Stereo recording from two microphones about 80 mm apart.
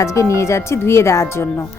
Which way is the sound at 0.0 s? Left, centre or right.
Left.